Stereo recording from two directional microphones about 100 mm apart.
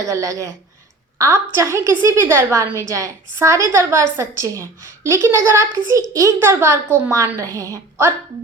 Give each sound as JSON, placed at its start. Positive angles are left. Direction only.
{"t": 0.0, "sound": "a woman's voice", "side_deg": -35}